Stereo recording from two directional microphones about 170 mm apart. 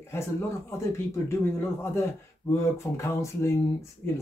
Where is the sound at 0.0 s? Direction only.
15° left (ahead or behind).